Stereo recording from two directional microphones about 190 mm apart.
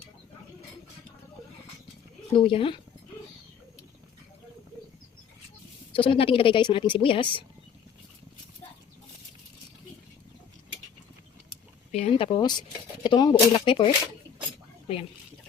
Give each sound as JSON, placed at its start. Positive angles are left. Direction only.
{"t": 2.3, "sound": "speech", "side_deg": 30}
{"t": 5.9, "sound": "speech", "side_deg": 30}
{"t": 11.9, "sound": "speech", "side_deg": 35}